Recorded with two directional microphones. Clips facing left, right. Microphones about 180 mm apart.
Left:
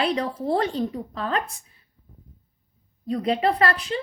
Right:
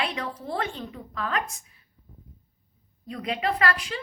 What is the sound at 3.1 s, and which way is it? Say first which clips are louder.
Speech: left 6 dB; 35° left (ahead or behind).